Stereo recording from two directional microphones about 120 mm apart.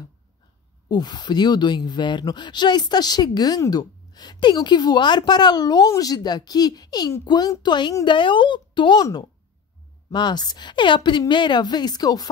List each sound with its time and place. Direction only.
0.8 s speech: 35° left (ahead or behind)